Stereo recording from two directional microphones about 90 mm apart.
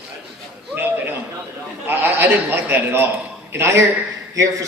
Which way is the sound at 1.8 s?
25° right (ahead or behind).